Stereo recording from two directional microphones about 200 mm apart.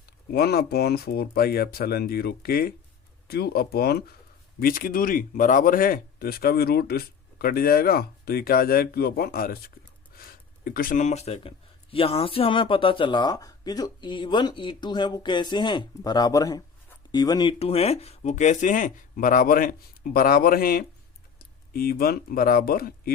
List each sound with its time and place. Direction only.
0.3 s speech: 50° left (ahead or behind)